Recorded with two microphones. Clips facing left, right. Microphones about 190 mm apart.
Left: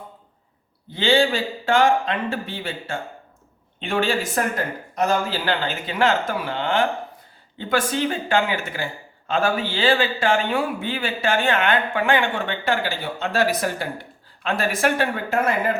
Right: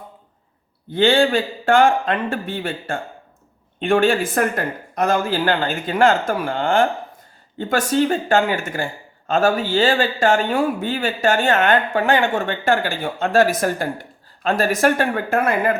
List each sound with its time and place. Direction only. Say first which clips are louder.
0.9 s speech: right 3 dB; 55° right (ahead or behind)